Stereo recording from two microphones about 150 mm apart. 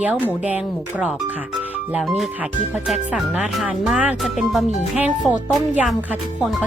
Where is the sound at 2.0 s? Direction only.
Centre (ahead or behind).